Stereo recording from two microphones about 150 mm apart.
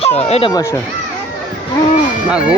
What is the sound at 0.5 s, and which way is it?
Speech, 20° left (ahead or behind).